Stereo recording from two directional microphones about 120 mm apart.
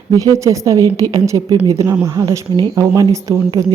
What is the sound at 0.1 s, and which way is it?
A woman's voice, 30° right (ahead or behind).